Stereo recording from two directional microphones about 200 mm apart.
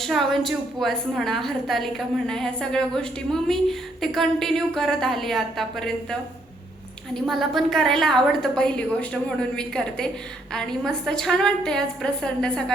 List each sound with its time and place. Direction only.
0.0 s a woman's voice: centre (ahead or behind)